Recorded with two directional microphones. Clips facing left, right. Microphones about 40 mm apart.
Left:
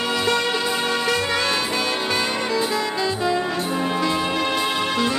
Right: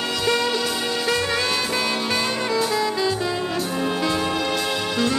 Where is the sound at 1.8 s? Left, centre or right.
Centre.